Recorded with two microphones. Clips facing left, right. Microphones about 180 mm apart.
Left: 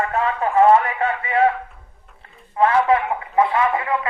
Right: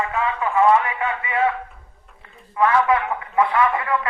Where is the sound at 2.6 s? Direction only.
30° left (ahead or behind).